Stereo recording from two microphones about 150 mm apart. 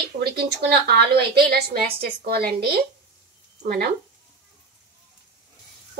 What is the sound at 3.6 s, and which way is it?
Speech, 70° right (ahead or behind).